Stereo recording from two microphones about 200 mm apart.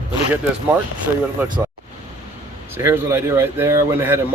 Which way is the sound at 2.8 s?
15° right (ahead or behind).